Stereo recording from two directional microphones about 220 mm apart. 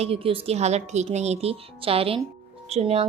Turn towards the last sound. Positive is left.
turn(degrees=-30)  # may be behind; listen again after turning